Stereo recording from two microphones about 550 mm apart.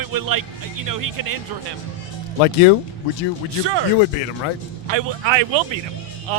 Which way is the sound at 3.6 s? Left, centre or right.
Right.